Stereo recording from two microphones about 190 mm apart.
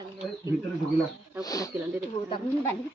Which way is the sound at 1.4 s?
20° left (ahead or behind).